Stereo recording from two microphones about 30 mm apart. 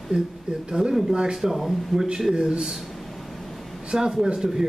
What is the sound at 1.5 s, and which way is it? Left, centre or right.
Speech, centre.